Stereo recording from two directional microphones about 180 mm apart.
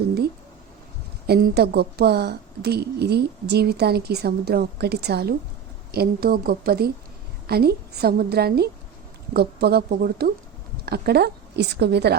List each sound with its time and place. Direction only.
1.3 s a woman's voice: 60° right (ahead or behind)